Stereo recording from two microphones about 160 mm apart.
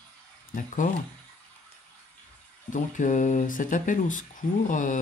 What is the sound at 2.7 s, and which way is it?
Speech, 50° left (ahead or behind).